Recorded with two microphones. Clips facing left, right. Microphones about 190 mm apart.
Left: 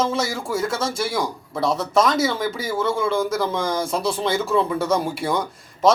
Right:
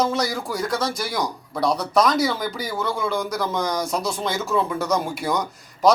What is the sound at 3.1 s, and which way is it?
Speech, 25° left (ahead or behind).